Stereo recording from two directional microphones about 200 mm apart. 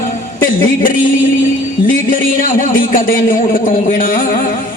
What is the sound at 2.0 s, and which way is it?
Speech, 45° left (ahead or behind).